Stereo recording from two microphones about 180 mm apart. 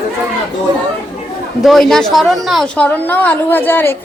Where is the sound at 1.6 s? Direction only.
Centre (ahead or behind).